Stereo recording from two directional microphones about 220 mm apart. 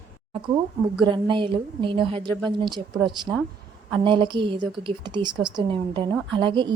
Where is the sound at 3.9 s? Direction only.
20° right (ahead or behind).